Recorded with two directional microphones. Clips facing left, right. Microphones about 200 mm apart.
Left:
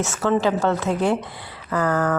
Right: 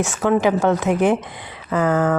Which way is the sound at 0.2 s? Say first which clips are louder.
Right 3 dB; 15° right (ahead or behind).